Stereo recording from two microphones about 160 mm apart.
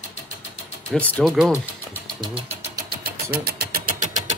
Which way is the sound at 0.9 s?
10° left (ahead or behind).